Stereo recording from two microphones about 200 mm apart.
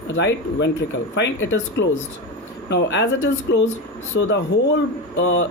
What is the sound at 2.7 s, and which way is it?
Speech, 60° left (ahead or behind).